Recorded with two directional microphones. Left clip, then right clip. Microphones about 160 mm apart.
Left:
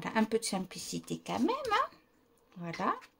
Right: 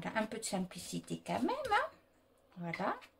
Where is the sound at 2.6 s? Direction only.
70° left (ahead or behind).